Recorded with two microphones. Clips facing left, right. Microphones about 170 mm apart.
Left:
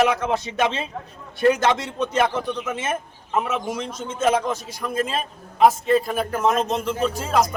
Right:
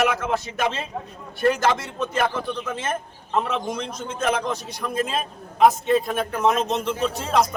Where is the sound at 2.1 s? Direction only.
20° left (ahead or behind).